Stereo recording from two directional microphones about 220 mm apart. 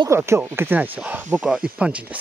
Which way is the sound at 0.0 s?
10° right (ahead or behind).